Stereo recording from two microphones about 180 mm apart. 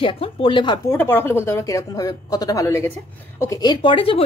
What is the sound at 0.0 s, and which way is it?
Speech, 30° left (ahead or behind).